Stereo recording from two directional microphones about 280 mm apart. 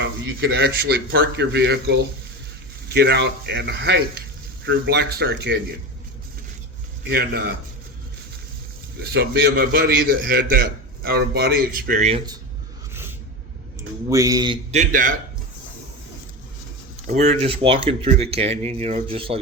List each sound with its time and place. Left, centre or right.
0.3 s a man's voice: right
7.1 s a man's voice: right
9.0 s a man's voice: right; by 12.4 s centre
12.9 s a sound: centre
14.1 s a man's voice: centre
17.1 s speech: right